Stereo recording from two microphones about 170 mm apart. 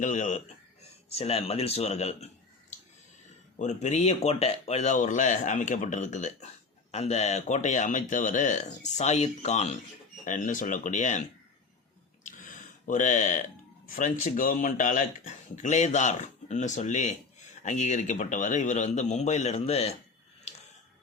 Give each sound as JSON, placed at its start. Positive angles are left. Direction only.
{"t": 0.0, "sound": "speech", "side_deg": 45}
{"t": 3.6, "sound": "speech", "side_deg": 45}
{"t": 12.2, "sound": "a sound", "side_deg": 50}
{"t": 13.8, "sound": "speech", "side_deg": 50}